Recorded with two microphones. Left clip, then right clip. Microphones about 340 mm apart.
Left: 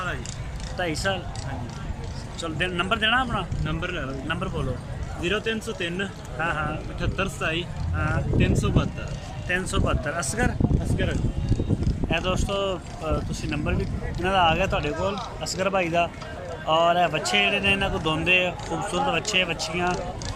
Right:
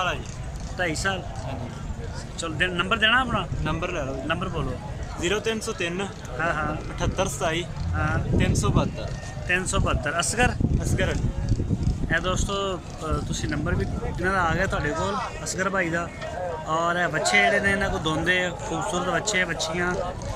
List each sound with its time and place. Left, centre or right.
0.8 s speech: centre
2.4 s speech: centre
3.6 s speech: centre
4.3 s speech: centre
5.2 s speech: centre
6.4 s speech: centre
7.0 s speech: centre
9.5 s speech: centre
10.9 s speech: centre
12.1 s speech: centre